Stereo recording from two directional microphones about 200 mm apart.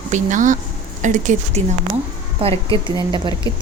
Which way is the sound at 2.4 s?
30° right (ahead or behind).